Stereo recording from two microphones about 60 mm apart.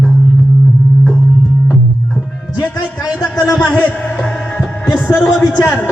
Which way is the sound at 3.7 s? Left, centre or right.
Left.